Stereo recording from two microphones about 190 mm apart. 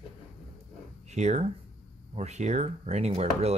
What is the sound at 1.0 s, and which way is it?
Speech, 35° right (ahead or behind).